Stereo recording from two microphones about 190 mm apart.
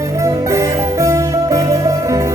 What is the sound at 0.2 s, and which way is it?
Music, 15° right (ahead or behind).